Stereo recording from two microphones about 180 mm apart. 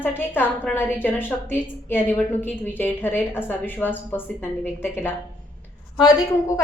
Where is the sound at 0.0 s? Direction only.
10° left (ahead or behind).